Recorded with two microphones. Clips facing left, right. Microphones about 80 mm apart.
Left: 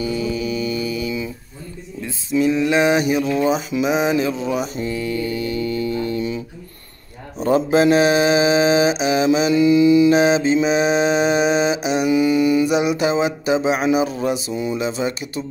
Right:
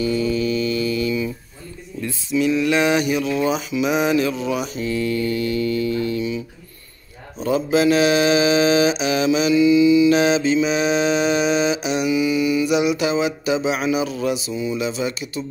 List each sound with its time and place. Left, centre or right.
0.0 s mantra: centre
2.3 s mantra: left
4.9 s mantra: centre; by 6.4 s left
7.4 s mantra: left
10.1 s mantra: left
14.8 s mantra: left